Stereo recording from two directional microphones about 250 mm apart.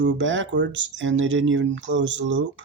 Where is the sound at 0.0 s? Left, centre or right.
Right.